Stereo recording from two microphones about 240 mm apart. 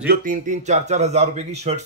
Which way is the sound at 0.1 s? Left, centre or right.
Right.